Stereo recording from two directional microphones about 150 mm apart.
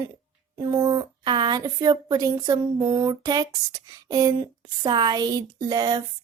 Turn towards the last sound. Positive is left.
turn(degrees=-30)  # may be behind; listen again after turning